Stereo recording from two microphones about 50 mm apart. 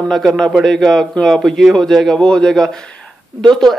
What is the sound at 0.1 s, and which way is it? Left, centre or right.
A man's voice, centre.